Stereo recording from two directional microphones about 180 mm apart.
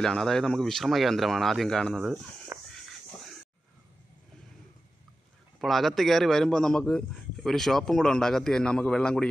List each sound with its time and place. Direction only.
0.0 s a man's voice: 5° left (ahead or behind)
2.5 s a sound: 15° right (ahead or behind)
5.6 s a man's voice: centre (ahead or behind)